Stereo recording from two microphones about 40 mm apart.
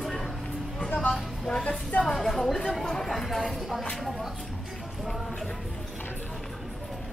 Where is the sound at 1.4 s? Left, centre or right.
Centre.